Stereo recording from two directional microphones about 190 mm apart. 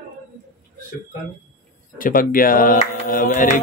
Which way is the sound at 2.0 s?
45° left (ahead or behind).